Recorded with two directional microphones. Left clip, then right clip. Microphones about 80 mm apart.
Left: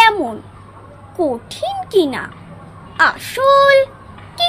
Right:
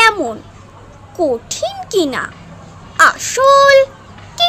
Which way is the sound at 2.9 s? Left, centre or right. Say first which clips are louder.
Right 4 dB; right.